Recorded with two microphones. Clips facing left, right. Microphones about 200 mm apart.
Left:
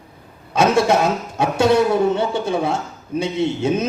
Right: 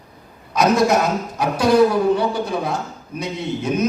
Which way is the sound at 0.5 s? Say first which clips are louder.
Even; 30° left (ahead or behind).